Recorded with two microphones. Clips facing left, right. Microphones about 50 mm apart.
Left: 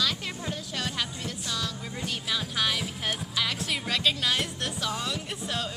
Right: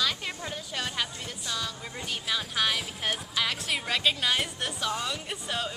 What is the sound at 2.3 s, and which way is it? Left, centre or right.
Music, centre.